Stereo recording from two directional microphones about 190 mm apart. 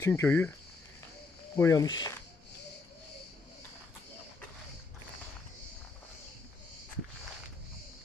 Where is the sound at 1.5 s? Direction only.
15° left (ahead or behind).